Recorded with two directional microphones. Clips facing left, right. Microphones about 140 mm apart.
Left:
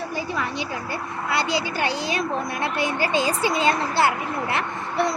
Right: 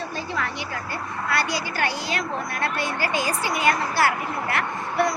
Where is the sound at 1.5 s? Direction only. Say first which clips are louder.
Left 2 dB; 20° left (ahead or behind).